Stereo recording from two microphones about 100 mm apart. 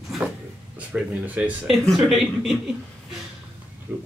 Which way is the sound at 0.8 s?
15° right (ahead or behind).